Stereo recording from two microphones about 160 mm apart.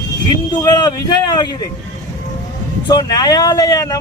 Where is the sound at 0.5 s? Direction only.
25° left (ahead or behind).